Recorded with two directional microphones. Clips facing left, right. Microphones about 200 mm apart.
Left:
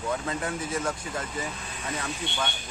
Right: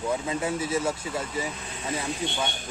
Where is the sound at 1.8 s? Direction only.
25° right (ahead or behind).